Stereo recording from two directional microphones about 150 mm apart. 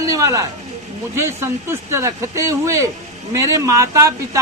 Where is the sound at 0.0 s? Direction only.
20° right (ahead or behind).